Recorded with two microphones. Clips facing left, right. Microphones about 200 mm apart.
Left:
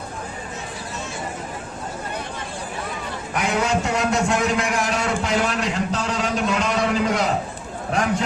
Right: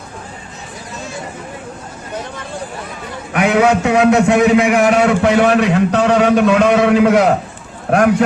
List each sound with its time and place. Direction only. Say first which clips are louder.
3.3 s a man's voice: right 9 dB; 65° right (ahead or behind)